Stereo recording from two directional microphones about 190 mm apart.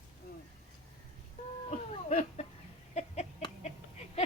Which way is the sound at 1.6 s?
35° left (ahead or behind).